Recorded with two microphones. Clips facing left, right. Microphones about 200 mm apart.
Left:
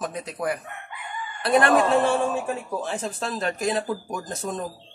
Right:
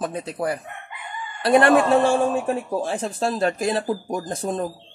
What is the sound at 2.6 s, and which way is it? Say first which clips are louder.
Speech: right 4 dB; 30° right (ahead or behind).